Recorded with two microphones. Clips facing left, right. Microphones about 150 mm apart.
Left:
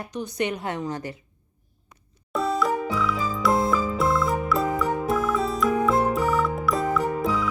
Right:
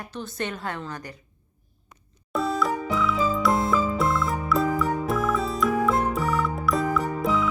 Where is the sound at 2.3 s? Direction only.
Centre (ahead or behind).